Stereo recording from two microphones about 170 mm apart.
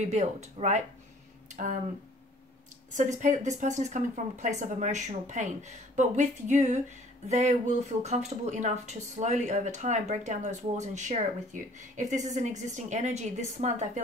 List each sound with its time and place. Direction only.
0.0 s speech: 40° right (ahead or behind)
2.9 s speech: 45° right (ahead or behind)